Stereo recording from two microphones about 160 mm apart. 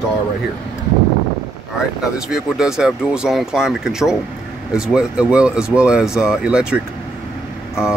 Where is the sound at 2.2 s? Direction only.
5° right (ahead or behind).